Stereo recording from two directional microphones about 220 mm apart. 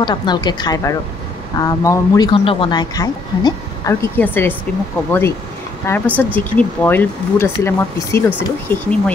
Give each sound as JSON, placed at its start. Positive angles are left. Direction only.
{"t": 0.0, "sound": "a woman's voice", "side_deg": 20}
{"t": 5.9, "sound": "speech", "side_deg": 5}